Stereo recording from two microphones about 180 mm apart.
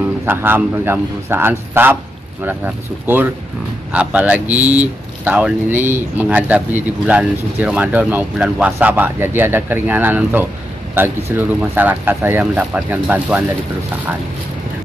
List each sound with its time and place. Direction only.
0.2 s speech: 10° right (ahead or behind)